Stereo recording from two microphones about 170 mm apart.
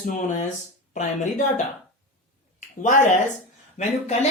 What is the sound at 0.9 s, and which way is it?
Speech, 45° left (ahead or behind).